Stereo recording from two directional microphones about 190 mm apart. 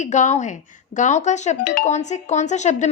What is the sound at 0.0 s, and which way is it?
Speech, 40° left (ahead or behind).